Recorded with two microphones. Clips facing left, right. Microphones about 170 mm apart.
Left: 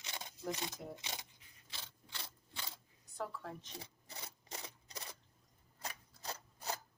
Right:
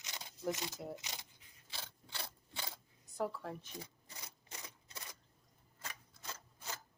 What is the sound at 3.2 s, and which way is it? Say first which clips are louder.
Speech: right 4 dB; 10° right (ahead or behind).